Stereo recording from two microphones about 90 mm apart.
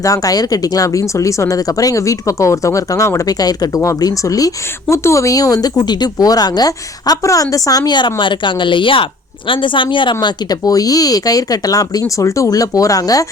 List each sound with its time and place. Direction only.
0.0 s a woman's voice: 40° left (ahead or behind)